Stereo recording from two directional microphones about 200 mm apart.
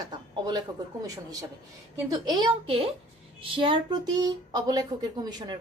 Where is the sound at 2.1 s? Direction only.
20° right (ahead or behind).